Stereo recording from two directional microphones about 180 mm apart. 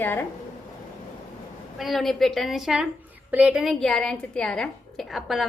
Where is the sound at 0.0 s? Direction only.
10° left (ahead or behind).